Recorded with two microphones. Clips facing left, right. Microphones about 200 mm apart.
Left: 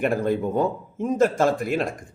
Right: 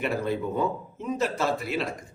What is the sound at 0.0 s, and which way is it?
A man's voice, 50° left (ahead or behind).